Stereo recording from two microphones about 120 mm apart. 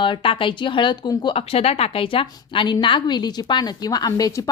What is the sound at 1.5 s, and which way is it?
A woman's voice, 55° left (ahead or behind).